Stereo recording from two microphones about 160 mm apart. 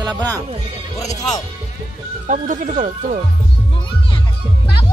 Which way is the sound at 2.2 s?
50° right (ahead or behind).